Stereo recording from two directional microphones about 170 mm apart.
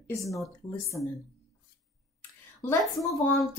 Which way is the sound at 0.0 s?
20° left (ahead or behind).